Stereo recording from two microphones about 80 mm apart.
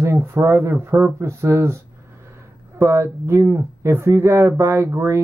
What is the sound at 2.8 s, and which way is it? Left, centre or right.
Speech, right.